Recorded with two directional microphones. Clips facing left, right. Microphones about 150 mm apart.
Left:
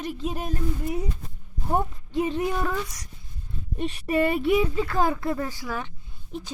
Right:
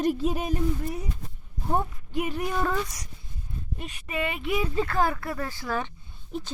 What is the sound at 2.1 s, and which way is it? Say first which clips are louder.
Speech: left 6 dB; 25° left (ahead or behind).